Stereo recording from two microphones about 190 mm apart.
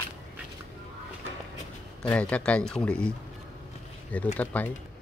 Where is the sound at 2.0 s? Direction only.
5° left (ahead or behind).